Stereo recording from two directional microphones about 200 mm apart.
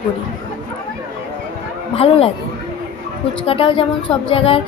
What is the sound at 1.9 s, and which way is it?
Speech, 30° left (ahead or behind).